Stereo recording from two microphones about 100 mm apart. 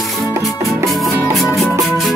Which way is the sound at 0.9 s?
Centre (ahead or behind).